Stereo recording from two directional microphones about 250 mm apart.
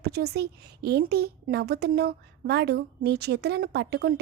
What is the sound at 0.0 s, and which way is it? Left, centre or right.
A woman's voice, right.